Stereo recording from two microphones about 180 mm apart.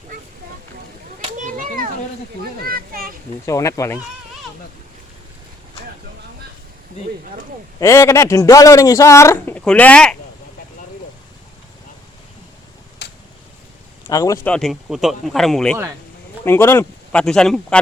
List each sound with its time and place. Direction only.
1.2 s a sound: 45° right (ahead or behind)
2.6 s children playing: 55° right (ahead or behind)
3.4 s speech: 15° left (ahead or behind)
7.8 s speech: 15° left (ahead or behind)
14.1 s speech: 20° left (ahead or behind)
14.4 s speech: centre (ahead or behind)